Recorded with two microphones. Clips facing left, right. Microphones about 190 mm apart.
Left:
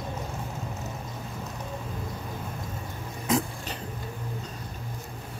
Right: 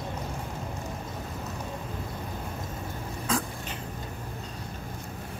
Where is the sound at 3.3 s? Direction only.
20° left (ahead or behind).